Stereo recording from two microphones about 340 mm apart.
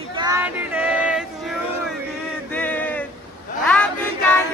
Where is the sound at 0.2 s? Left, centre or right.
Centre.